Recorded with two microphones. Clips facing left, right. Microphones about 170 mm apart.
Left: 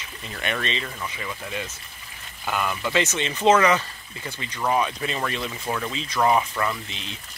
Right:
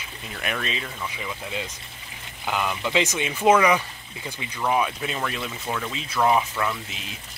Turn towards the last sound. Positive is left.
turn(degrees=-5)  # may be behind; listen again after turning